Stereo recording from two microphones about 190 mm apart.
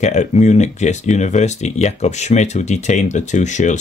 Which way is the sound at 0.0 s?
40° left (ahead or behind).